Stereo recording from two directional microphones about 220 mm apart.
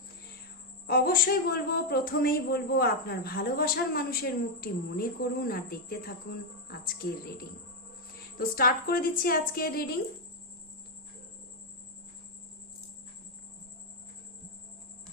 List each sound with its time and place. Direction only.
0.9 s a woman's voice: 45° left (ahead or behind)
8.4 s a woman's voice: 40° left (ahead or behind)